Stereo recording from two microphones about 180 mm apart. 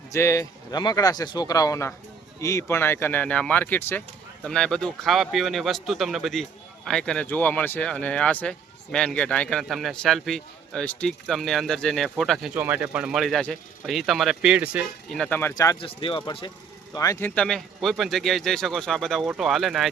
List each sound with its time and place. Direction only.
0.1 s speech: 15° left (ahead or behind); by 19.9 s centre (ahead or behind)